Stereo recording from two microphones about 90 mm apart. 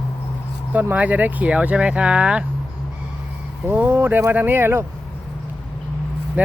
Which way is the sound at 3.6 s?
20° right (ahead or behind).